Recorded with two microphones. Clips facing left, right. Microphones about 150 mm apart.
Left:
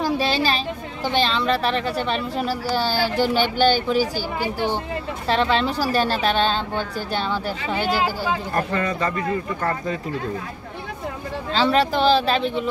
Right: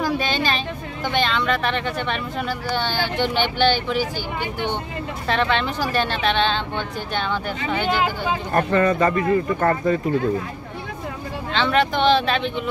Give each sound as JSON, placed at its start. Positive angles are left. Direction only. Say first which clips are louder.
{"t": 0.0, "sound": "a woman's voice", "louder": "left 1 dB", "side_deg": 35}
{"t": 8.7, "sound": "a man's voice", "louder": "right 6 dB", "side_deg": -45}
{"t": 11.5, "sound": "a woman's voice", "louder": "left 1 dB", "side_deg": 35}